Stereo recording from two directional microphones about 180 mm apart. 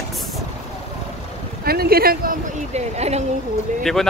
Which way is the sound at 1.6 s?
60° right (ahead or behind).